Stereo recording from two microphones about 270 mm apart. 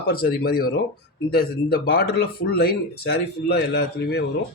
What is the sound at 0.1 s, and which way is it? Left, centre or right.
A man's voice, left.